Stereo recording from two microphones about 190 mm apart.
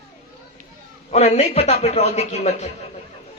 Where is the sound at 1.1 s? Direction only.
35° left (ahead or behind).